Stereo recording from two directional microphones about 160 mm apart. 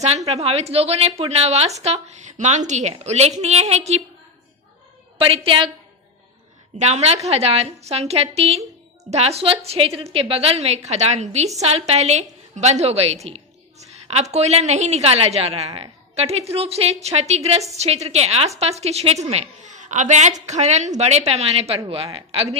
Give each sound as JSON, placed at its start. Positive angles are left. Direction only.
{"t": 0.3, "sound": "a woman's voice", "side_deg": -40}
{"t": 5.1, "sound": "a woman's voice", "side_deg": -35}
{"t": 6.7, "sound": "a woman's voice", "side_deg": -45}